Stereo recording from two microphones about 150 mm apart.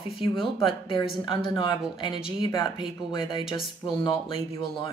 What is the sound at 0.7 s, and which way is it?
Speech, 35° left (ahead or behind).